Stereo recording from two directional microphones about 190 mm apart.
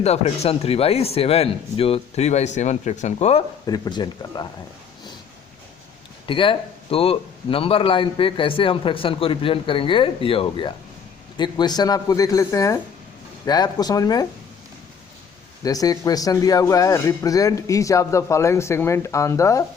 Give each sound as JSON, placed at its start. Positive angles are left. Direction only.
{"t": 0.0, "sound": "speech", "side_deg": 35}
{"t": 3.7, "sound": "a man's voice", "side_deg": 20}
{"t": 6.2, "sound": "a man's voice", "side_deg": 25}
{"t": 15.6, "sound": "a man's voice", "side_deg": 20}